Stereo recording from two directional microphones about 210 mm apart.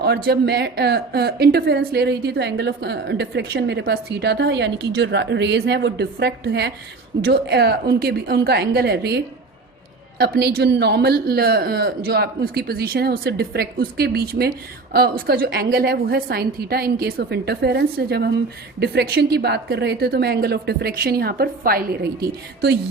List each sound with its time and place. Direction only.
0.0 s a woman's voice: 50° right (ahead or behind)